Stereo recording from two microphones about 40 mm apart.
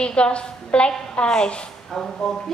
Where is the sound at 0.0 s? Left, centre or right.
Left.